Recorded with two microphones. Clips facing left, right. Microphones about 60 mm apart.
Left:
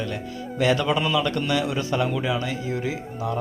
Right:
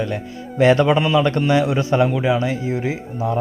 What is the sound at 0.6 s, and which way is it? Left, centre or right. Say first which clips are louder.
A man's voice: right 7 dB; right.